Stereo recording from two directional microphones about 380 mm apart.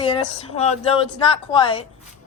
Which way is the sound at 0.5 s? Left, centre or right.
Centre.